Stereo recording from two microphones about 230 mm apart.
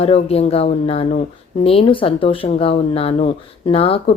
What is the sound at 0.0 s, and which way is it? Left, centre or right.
Speech, left.